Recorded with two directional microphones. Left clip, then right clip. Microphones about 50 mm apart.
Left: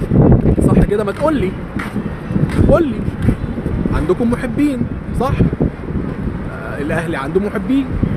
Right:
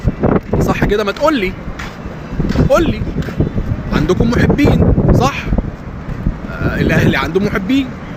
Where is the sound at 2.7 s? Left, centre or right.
Left.